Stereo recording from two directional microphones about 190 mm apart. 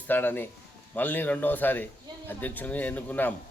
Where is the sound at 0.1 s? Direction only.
10° left (ahead or behind).